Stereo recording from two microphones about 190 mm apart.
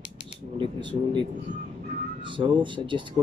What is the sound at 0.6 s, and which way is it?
Speech, 25° right (ahead or behind).